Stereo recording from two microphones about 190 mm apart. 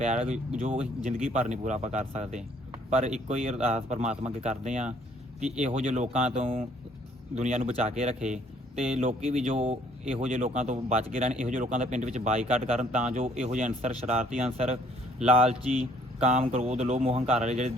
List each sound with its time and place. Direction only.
0.0 s speech: 35° right (ahead or behind)